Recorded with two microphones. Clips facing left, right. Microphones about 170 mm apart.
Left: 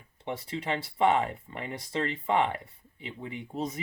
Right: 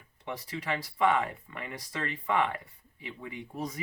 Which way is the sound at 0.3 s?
25° left (ahead or behind).